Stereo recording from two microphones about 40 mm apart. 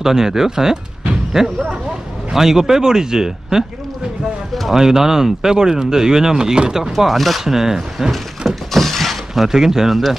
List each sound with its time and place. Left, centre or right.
0.0 s speech: centre
4.7 s speech: centre
6.8 s speech: centre
8.1 s shatter: centre